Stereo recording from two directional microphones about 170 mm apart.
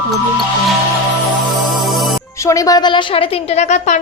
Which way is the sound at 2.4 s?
20° left (ahead or behind).